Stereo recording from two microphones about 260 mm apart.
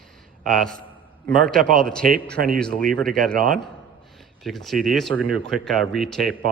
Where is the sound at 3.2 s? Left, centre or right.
Right.